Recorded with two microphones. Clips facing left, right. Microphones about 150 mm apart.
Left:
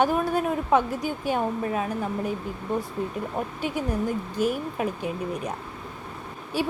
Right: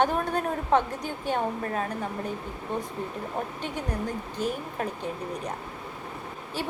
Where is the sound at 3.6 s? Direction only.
10° left (ahead or behind).